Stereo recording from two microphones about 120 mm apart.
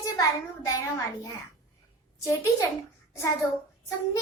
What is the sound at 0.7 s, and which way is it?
Speech, 30° left (ahead or behind).